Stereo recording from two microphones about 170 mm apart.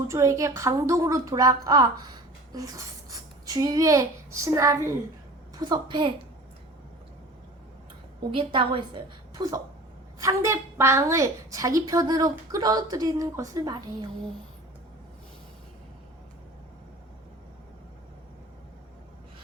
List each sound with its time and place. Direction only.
0.1 s a woman's voice: 20° right (ahead or behind)
8.3 s a woman's voice: 30° right (ahead or behind)
9.3 s a woman's voice: 20° right (ahead or behind)